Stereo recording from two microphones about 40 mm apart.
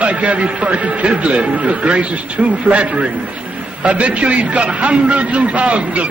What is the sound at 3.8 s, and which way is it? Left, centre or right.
A man's voice, right.